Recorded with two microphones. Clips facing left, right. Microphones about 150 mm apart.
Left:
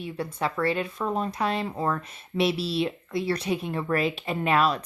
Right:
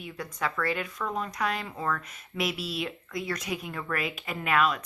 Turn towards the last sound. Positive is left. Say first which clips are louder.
# left 3 dB
turn(degrees=35)  # may be behind; listen again after turning